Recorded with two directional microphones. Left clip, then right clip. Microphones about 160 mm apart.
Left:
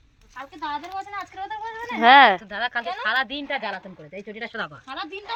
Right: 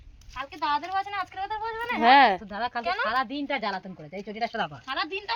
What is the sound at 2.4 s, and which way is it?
Speech, 50° right (ahead or behind).